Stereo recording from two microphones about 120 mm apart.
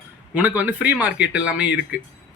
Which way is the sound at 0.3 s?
15° right (ahead or behind).